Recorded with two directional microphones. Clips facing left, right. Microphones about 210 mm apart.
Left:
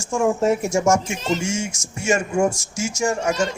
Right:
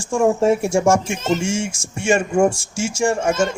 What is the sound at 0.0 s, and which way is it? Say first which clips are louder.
A man's voice: right 3 dB; 30° right (ahead or behind).